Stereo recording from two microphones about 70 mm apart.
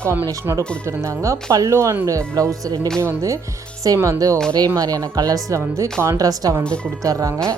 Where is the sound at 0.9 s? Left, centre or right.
Right.